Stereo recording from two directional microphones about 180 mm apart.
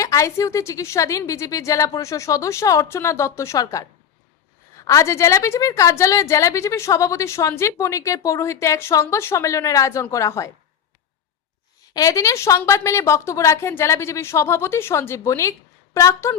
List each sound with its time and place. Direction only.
0.0 s a woman's voice: 15° left (ahead or behind)
4.9 s a woman's voice: 15° left (ahead or behind)
11.9 s a woman's voice: 20° left (ahead or behind)